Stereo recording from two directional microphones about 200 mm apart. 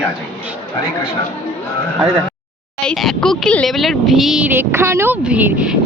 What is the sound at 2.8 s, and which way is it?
Speech, 5° left (ahead or behind).